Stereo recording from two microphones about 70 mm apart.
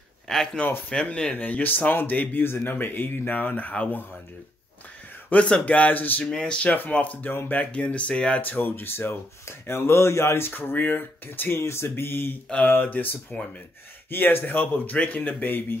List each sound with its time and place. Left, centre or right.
0.3 s speech: centre
5.3 s speech: centre
6.3 s speech: centre
6.7 s speech: left
7.7 s speech: centre